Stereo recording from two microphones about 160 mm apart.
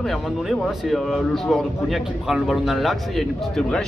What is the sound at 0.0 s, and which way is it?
Speech, centre (ahead or behind).